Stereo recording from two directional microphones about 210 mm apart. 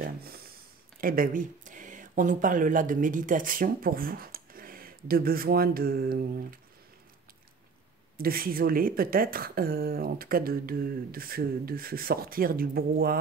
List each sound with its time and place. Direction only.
0.0 s speech: 45° right (ahead or behind)
8.2 s speech: 45° right (ahead or behind)